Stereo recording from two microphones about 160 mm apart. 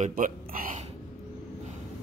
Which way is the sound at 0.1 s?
60° right (ahead or behind).